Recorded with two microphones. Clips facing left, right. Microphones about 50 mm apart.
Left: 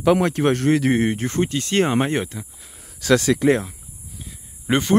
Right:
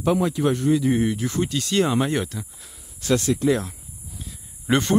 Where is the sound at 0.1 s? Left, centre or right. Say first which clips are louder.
Left 3 dB; left.